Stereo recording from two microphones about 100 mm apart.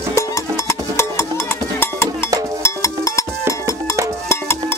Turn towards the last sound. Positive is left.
turn(degrees=30)  # may be behind; listen again after turning